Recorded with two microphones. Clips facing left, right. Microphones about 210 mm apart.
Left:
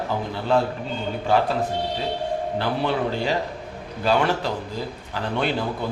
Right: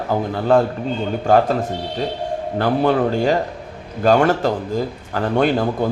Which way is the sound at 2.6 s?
50° right (ahead or behind).